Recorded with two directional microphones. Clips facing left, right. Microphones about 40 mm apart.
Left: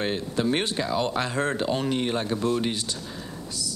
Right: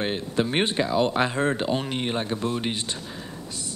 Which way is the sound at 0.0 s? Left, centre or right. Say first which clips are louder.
Even; right.